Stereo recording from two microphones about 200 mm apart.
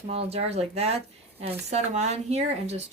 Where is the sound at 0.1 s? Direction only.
30° right (ahead or behind).